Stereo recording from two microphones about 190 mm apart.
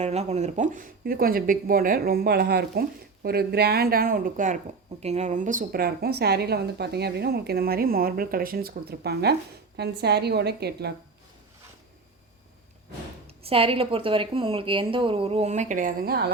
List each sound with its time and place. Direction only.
0.0 s a woman's voice: 35° right (ahead or behind); by 10.9 s 60° right (ahead or behind)
13.2 s a woman's voice: 30° right (ahead or behind); by 16.3 s 55° right (ahead or behind)